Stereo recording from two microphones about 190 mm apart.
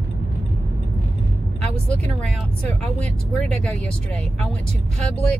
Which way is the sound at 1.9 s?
5° left (ahead or behind).